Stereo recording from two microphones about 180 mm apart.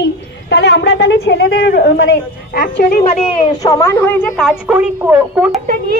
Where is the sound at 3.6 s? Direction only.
20° left (ahead or behind).